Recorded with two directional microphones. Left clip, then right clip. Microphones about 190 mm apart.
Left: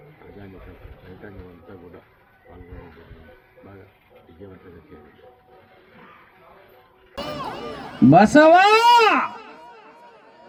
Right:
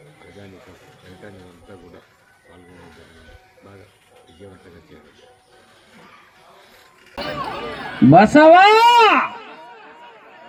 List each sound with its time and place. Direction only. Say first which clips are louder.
7.2 s speech: right 4 dB; 30° right (ahead or behind)